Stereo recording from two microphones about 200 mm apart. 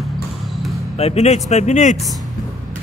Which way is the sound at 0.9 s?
30° left (ahead or behind).